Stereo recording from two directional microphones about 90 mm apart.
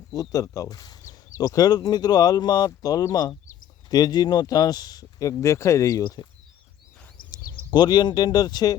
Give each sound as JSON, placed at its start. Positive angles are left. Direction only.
{"t": 0.1, "sound": "speech", "side_deg": 45}
{"t": 5.3, "sound": "speech", "side_deg": 35}
{"t": 6.0, "sound": "speech", "side_deg": 50}
{"t": 7.7, "sound": "speech", "side_deg": 50}